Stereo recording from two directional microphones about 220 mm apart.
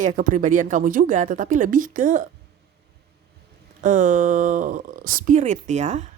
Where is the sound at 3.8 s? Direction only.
35° right (ahead or behind).